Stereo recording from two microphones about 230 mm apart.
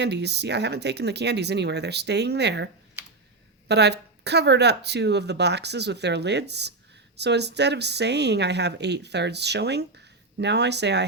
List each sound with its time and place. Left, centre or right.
0.0 s speech: right
3.7 s speech: right